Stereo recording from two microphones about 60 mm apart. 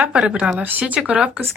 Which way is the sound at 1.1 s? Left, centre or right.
Centre.